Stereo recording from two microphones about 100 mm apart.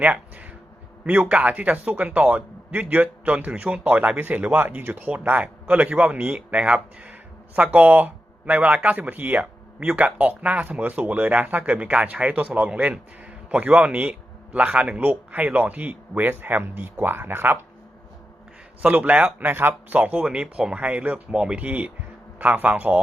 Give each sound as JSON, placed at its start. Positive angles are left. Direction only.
{"t": 0.0, "sound": "a sound", "side_deg": -15}
{"t": 1.0, "sound": "speech", "side_deg": -15}
{"t": 18.8, "sound": "speech", "side_deg": -15}